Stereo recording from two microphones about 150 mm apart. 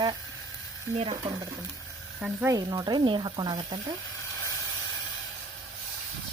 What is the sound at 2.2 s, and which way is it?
Speech, 5° right (ahead or behind).